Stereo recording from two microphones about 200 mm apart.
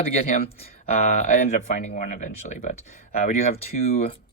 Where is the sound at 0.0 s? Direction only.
30° left (ahead or behind).